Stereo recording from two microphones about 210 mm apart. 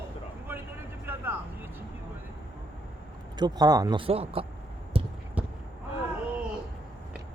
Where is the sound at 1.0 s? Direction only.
10° right (ahead or behind).